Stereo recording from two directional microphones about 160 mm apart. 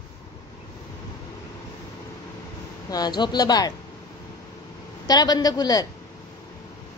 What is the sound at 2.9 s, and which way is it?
Speech, 25° left (ahead or behind).